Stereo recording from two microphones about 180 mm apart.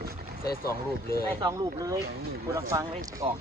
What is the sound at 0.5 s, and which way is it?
Speech, 55° left (ahead or behind).